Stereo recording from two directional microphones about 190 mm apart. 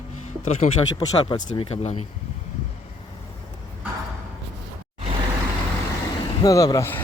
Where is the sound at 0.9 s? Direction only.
25° left (ahead or behind).